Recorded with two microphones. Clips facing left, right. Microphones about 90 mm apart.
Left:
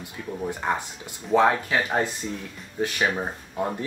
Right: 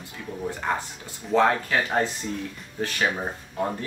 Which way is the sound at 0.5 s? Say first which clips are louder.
Even; 15° left (ahead or behind).